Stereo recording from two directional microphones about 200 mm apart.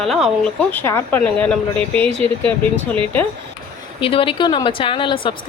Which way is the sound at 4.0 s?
30° left (ahead or behind).